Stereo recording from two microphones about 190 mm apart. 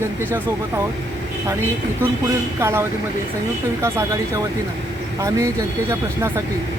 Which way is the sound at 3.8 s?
15° right (ahead or behind).